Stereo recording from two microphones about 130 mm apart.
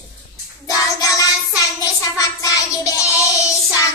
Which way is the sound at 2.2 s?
25° left (ahead or behind).